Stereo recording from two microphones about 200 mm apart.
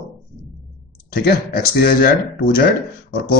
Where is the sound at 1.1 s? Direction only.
50° left (ahead or behind).